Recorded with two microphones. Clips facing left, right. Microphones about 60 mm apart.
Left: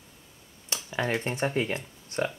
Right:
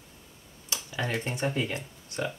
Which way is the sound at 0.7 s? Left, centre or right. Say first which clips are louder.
Left 3 dB; left.